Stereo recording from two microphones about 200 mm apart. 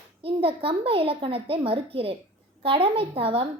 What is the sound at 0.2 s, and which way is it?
A child's voice, 30° right (ahead or behind).